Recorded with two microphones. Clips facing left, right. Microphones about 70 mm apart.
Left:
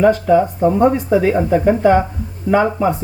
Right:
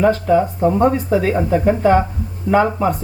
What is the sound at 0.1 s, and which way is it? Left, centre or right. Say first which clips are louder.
Speech: left 2 dB; centre.